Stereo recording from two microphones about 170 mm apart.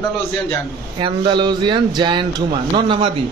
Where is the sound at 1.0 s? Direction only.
30° right (ahead or behind).